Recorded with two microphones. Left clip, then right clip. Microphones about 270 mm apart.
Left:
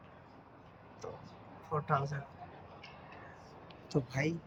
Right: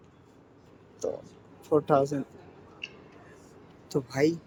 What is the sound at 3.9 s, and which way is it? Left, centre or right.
Speech, centre.